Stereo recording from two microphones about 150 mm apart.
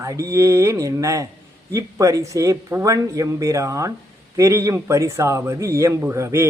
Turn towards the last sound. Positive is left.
turn(degrees=-20)  # may be behind; listen again after turning